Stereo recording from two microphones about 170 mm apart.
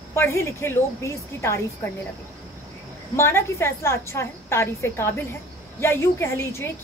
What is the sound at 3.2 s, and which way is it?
A woman's voice, 15° left (ahead or behind).